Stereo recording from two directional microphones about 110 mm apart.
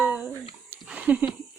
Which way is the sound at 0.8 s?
10° right (ahead or behind).